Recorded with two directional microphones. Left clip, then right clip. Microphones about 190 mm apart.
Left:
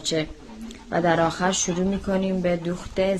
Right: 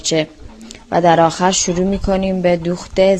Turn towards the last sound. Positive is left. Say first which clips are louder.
# right 10 dB
turn(degrees=-40)  # may be behind; listen again after turning